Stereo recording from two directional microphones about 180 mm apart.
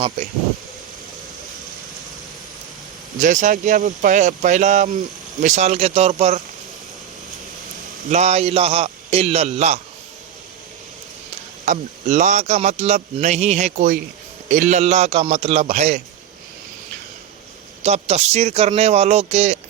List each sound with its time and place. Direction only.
3.2 s speech: 45° right (ahead or behind)
8.1 s speech: 40° right (ahead or behind)
11.6 s speech: 45° right (ahead or behind)
17.8 s speech: 40° right (ahead or behind)